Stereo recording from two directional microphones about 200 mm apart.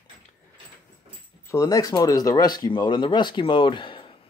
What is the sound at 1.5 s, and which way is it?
Speech, 15° left (ahead or behind).